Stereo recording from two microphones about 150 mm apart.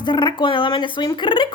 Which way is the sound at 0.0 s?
30° left (ahead or behind).